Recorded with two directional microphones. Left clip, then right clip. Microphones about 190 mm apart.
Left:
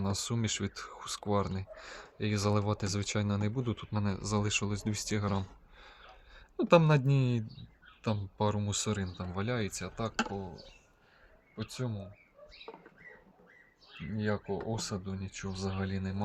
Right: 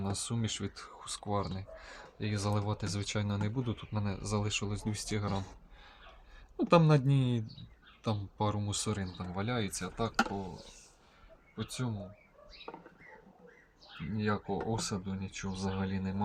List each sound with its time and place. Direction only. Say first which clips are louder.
0.0 s speech: left 2 dB; 40° left (ahead or behind)
5.8 s a sound: left 2 dB; 35° left (ahead or behind)
8.0 s speech: left 2 dB; 30° left (ahead or behind)
11.5 s speech: even; 25° left (ahead or behind)
14.2 s speech: even; 20° left (ahead or behind)